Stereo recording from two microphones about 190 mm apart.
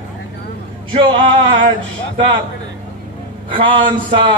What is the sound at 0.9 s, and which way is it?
Speech, 25° right (ahead or behind).